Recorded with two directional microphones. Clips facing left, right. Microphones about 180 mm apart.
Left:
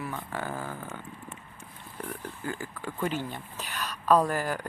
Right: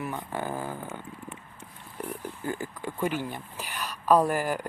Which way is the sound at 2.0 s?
15° right (ahead or behind).